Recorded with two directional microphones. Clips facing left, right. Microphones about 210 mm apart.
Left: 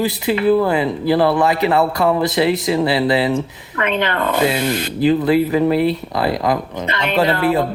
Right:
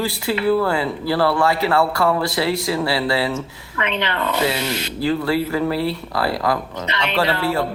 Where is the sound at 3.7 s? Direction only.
50° left (ahead or behind).